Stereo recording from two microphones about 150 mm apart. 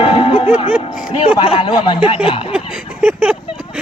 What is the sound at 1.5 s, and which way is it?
Speech, 35° left (ahead or behind).